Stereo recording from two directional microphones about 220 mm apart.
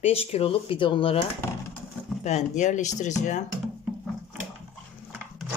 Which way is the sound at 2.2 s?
30° left (ahead or behind).